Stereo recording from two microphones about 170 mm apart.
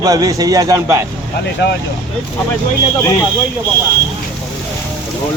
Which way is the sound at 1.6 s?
80° left.